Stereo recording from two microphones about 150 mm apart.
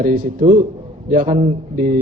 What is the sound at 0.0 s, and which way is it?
A man's voice, 65° right (ahead or behind).